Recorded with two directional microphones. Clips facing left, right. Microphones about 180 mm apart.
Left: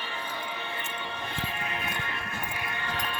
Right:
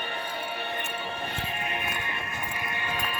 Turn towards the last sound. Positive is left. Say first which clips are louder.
# right 1 dB
turn(degrees=-10)  # may be behind; listen again after turning